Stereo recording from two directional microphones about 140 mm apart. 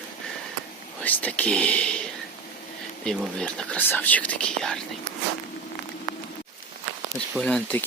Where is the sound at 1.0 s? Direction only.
10° left (ahead or behind).